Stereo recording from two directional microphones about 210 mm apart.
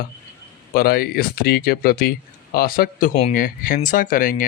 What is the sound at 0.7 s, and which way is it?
Speech, 45° left (ahead or behind).